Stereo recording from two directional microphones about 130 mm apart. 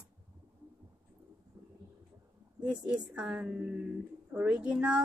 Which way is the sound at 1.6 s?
20° right (ahead or behind).